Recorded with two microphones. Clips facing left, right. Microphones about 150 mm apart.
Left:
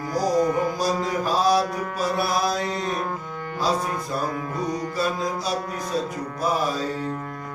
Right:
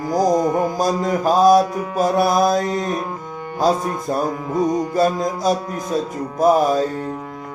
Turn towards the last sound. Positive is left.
turn(degrees=-15)  # may be behind; listen again after turning